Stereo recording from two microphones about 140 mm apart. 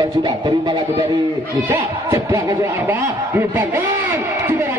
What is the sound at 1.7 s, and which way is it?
Speech, 20° right (ahead or behind).